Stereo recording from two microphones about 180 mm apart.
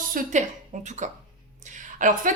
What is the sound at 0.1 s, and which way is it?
A woman's voice, 50° right (ahead or behind).